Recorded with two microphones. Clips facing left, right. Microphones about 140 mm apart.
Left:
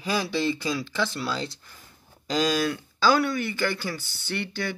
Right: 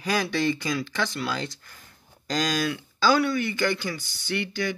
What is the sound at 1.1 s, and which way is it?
Speech, 30° left (ahead or behind).